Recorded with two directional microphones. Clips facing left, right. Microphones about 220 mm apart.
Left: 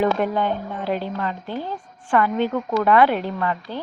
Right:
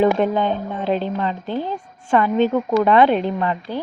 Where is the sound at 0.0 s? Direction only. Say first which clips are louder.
Right 4 dB; 20° right (ahead or behind).